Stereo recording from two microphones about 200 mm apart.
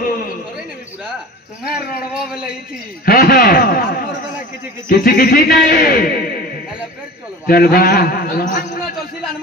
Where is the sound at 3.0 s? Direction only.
50° left (ahead or behind).